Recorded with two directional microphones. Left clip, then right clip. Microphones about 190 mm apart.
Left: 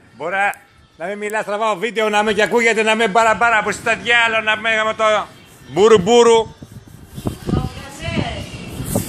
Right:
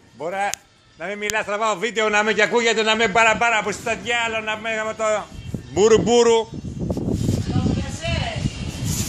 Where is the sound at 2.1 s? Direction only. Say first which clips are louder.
Left 2 dB; 25° left (ahead or behind).